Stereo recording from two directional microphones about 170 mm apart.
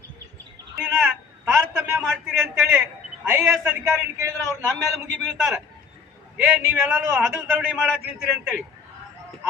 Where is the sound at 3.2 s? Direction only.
10° right (ahead or behind).